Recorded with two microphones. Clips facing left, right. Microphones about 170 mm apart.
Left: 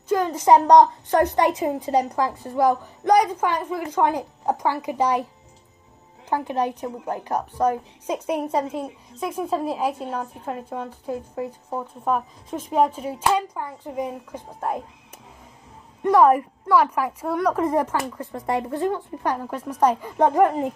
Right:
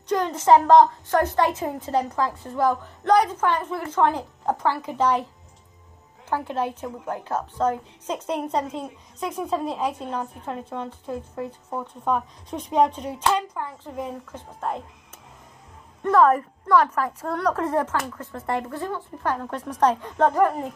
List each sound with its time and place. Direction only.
0.1 s a woman's voice: 10° left (ahead or behind)
6.2 s a woman's voice: 15° left (ahead or behind)
16.0 s a woman's voice: 15° left (ahead or behind)